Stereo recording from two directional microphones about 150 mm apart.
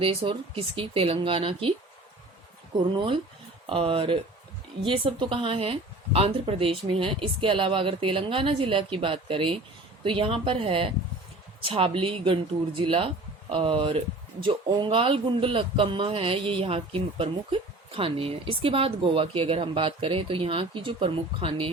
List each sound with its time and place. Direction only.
0.0 s speech: 40° right (ahead or behind)
2.7 s speech: 30° right (ahead or behind)